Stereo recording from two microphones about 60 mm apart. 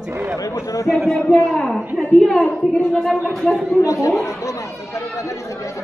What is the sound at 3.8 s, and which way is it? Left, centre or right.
Chatter, left.